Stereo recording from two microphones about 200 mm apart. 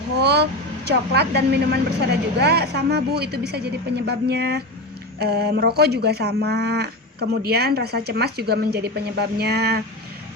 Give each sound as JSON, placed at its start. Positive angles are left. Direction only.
{"t": 0.2, "sound": "vehicle", "side_deg": -55}
{"t": 0.9, "sound": "speech", "side_deg": -55}